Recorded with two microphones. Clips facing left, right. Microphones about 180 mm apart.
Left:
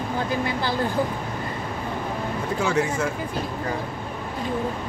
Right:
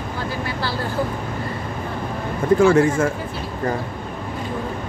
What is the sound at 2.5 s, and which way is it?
Speech, 50° right (ahead or behind).